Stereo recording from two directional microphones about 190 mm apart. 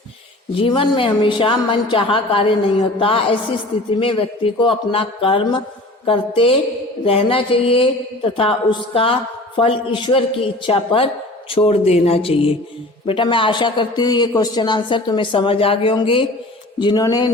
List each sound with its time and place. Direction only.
0.5 s speech: 30° left (ahead or behind)